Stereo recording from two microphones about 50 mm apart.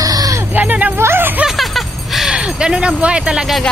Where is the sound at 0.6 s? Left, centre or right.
Right.